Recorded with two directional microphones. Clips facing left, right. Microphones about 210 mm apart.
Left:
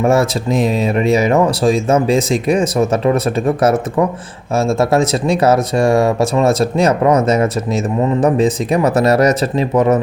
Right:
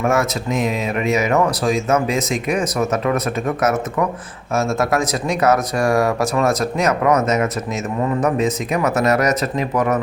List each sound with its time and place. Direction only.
0.0 s speech: 30° left (ahead or behind)